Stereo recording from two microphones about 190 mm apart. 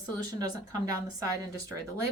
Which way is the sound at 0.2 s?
20° right (ahead or behind).